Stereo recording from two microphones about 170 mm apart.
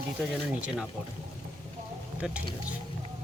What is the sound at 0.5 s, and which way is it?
Speech, 10° right (ahead or behind).